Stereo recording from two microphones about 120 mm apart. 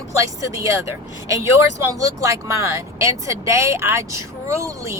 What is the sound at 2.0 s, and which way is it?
Speech, 25° right (ahead or behind).